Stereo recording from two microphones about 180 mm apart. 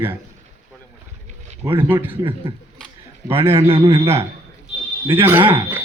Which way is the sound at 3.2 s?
15° right (ahead or behind).